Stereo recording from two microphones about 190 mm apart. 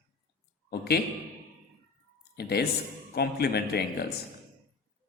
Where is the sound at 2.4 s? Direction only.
55° left (ahead or behind).